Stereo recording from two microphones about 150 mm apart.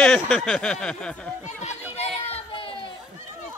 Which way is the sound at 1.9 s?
40° left (ahead or behind).